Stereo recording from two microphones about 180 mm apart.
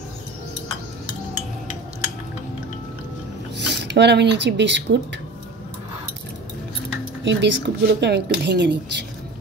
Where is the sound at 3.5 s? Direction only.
70° right (ahead or behind).